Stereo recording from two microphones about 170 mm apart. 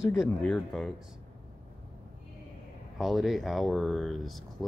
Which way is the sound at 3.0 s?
Centre (ahead or behind).